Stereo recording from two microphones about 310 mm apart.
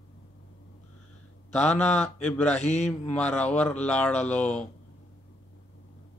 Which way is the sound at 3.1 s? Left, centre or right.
Centre.